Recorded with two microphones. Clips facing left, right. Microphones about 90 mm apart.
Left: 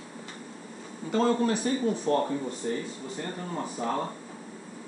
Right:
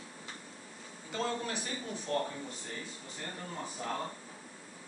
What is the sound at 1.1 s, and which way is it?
Speech, 45° left (ahead or behind).